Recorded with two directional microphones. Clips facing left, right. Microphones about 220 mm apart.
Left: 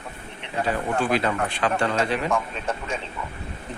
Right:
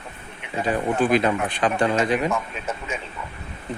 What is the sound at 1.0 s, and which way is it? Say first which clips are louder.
Speech: right 5 dB; 15° right (ahead or behind).